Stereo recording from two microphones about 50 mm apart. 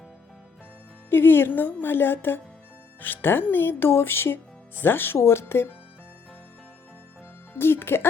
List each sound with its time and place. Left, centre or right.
1.1 s speech: left
7.5 s speech: left